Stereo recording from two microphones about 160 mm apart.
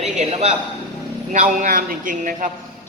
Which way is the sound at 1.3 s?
50° right (ahead or behind).